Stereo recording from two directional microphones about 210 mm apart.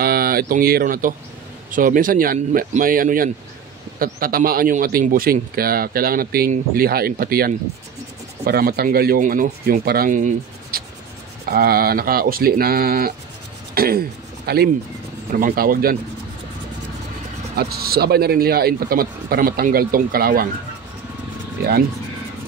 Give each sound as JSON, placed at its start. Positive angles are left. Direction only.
{"t": 0.0, "sound": "speech", "side_deg": -45}
{"t": 17.6, "sound": "speech", "side_deg": -50}